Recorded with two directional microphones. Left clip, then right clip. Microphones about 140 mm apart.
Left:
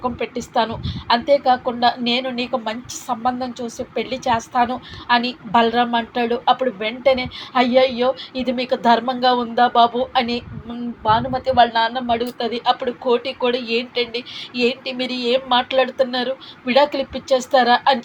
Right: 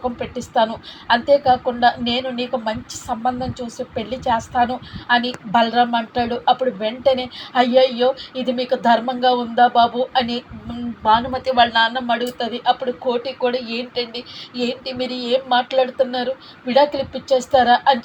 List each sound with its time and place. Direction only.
0.0 s a woman's voice: 10° right (ahead or behind)
11.3 s a woman's voice: 90° right
11.5 s a woman's voice: 20° right (ahead or behind)